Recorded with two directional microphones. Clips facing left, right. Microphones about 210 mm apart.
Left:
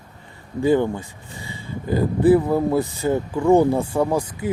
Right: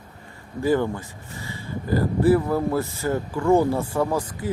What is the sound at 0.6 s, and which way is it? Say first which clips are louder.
Speech: left 3 dB; 20° left (ahead or behind).